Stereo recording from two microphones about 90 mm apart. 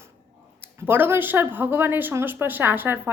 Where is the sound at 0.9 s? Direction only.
25° right (ahead or behind).